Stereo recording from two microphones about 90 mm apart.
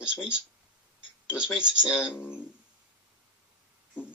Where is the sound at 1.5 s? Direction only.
10° right (ahead or behind).